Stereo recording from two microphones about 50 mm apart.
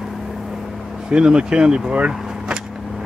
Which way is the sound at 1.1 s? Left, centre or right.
Centre.